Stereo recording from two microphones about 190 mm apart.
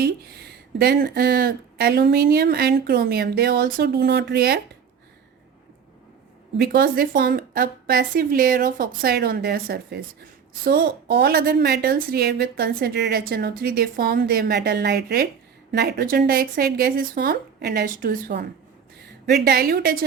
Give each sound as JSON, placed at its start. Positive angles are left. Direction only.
{"t": 0.0, "sound": "a woman's voice", "side_deg": -60}
{"t": 6.6, "sound": "a woman's voice", "side_deg": -55}
{"t": 19.2, "sound": "a woman's voice", "side_deg": -55}